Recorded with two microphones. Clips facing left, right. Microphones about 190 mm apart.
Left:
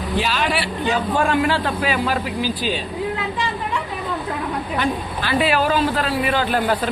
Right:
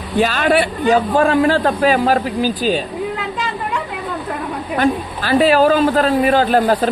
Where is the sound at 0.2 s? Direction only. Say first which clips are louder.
Right 9 dB; 50° right (ahead or behind).